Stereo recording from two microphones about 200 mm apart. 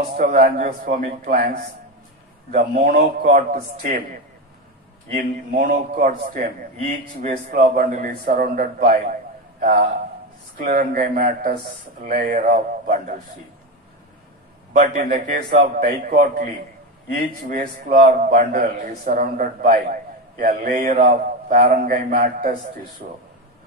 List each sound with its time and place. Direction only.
0.2 s a man's voice: 40° right (ahead or behind)
5.1 s a man's voice: 40° right (ahead or behind)
15.0 s a man's voice: 40° right (ahead or behind)